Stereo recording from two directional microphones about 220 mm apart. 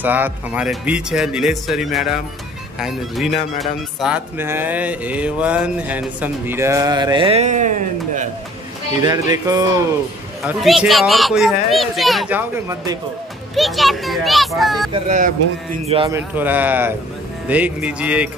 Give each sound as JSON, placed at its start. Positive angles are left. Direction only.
{"t": 0.0, "sound": "speech", "side_deg": -10}
{"t": 9.0, "sound": "speech", "side_deg": -15}
{"t": 10.4, "sound": "speech", "side_deg": 0}
{"t": 13.6, "sound": "speech", "side_deg": 0}
{"t": 14.9, "sound": "speech", "side_deg": -35}
{"t": 16.1, "sound": "speech", "side_deg": -10}